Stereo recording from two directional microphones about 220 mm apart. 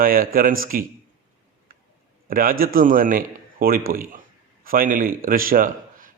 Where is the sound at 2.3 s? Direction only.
40° right (ahead or behind).